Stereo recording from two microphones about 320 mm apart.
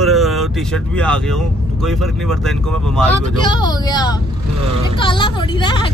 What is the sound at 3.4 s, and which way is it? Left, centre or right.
Speech, centre.